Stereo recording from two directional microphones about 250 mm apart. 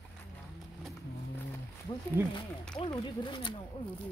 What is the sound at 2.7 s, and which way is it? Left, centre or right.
Speech, centre.